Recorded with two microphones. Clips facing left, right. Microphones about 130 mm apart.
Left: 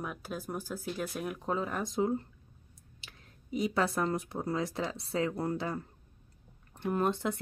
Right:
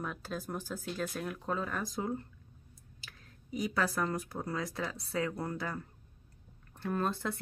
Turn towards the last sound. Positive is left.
turn(degrees=20)  # may be behind; listen again after turning